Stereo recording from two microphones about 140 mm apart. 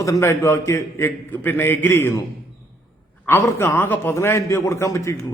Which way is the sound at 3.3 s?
20° left (ahead or behind).